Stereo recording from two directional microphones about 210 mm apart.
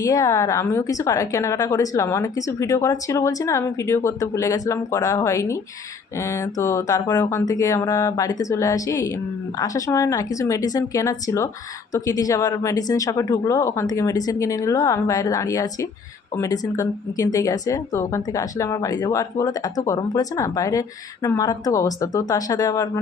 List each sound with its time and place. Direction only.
0.0 s a woman's voice: 15° left (ahead or behind)